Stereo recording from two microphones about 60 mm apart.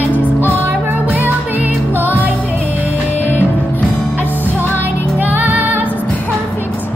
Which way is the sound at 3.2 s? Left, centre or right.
Left.